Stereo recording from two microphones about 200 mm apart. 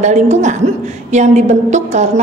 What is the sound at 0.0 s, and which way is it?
A woman's voice, 35° right (ahead or behind).